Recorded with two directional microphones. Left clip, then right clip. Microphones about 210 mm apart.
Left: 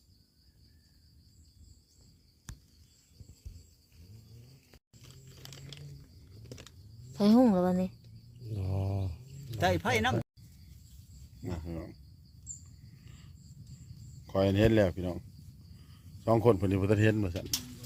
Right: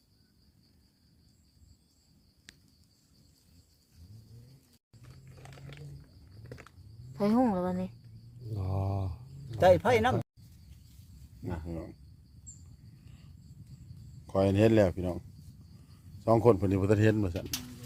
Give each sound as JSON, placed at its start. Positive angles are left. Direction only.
{"t": 7.1, "sound": "a woman's voice", "side_deg": 40}
{"t": 8.5, "sound": "a sound", "side_deg": 5}
{"t": 9.6, "sound": "speech", "side_deg": -55}
{"t": 11.4, "sound": "a sound", "side_deg": 0}
{"t": 14.3, "sound": "speech", "side_deg": 0}
{"t": 16.2, "sound": "speech", "side_deg": 0}